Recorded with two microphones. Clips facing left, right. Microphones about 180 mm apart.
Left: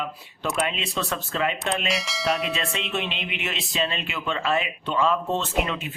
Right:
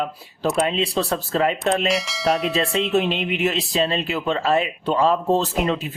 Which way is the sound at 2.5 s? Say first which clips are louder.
Right 9 dB; 35° right (ahead or behind).